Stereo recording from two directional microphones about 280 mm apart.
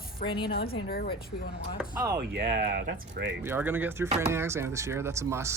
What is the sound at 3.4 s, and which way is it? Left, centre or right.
Speech, centre.